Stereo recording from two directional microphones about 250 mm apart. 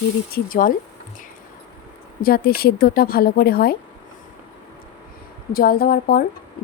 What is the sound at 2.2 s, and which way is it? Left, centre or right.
A woman's voice, left.